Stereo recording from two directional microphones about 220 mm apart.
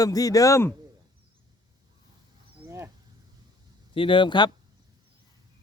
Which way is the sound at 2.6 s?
10° right (ahead or behind).